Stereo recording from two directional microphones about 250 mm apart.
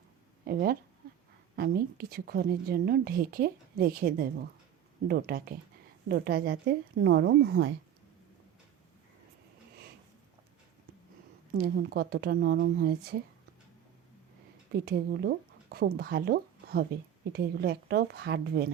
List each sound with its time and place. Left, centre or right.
0.4 s a woman's voice: right
11.5 s a woman's voice: right
14.7 s a woman's voice: right